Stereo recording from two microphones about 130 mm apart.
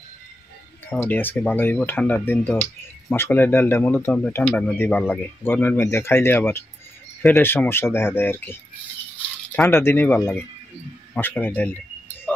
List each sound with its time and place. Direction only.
0.8 s speech: 15° left (ahead or behind)
11.1 s speech: 15° left (ahead or behind)